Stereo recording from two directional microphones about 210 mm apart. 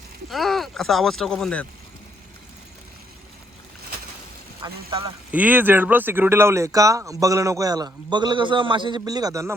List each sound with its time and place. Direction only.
0.3 s speech: centre (ahead or behind)
4.6 s speech: 20° right (ahead or behind)
5.3 s speech: 10° right (ahead or behind)